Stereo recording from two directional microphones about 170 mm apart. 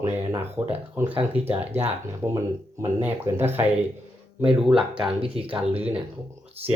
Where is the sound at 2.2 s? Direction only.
15° right (ahead or behind).